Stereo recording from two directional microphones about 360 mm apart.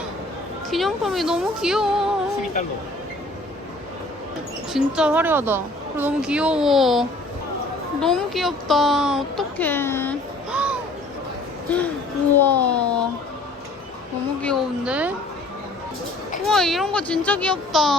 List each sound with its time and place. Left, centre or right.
0.7 s a woman's voice: centre
4.7 s a woman's voice: centre
14.4 s a woman's voice: centre
16.5 s a woman's voice: centre